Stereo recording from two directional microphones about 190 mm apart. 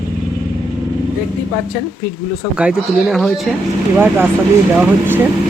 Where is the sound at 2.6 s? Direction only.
5° right (ahead or behind).